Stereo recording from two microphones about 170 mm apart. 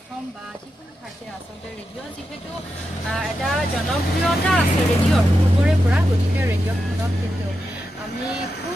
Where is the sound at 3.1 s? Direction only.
Centre (ahead or behind).